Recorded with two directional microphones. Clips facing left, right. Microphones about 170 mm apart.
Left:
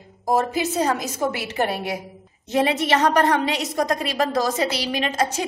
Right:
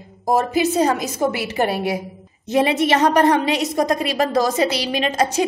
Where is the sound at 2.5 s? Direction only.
15° right (ahead or behind).